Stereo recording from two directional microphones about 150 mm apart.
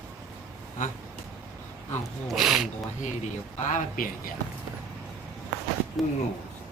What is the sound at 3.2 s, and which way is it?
Speech, 55° left (ahead or behind).